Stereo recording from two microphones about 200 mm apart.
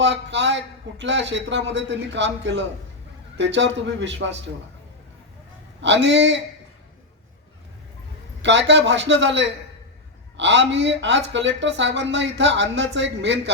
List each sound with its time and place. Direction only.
0.0 s speech: 65° right (ahead or behind)
5.8 s speech: 65° right (ahead or behind)
8.4 s speech: 65° right (ahead or behind)